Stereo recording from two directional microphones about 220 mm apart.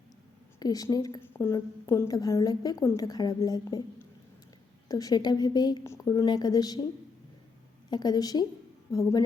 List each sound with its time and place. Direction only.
0.6 s a woman's voice: 15° left (ahead or behind)
4.9 s a woman's voice: 15° left (ahead or behind)
7.9 s a woman's voice: 20° left (ahead or behind)